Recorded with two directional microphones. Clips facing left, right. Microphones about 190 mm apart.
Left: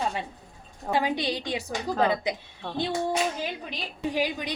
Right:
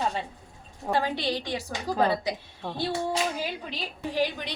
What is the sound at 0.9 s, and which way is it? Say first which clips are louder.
Speech: left 1 dB; 15° left (ahead or behind).